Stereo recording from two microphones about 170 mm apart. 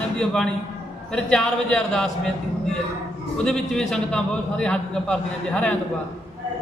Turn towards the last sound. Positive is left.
turn(degrees=5)  # may be behind; listen again after turning